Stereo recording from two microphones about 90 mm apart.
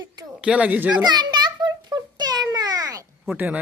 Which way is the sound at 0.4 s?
15° right (ahead or behind).